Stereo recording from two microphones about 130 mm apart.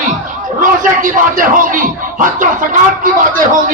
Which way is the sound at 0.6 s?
90° right.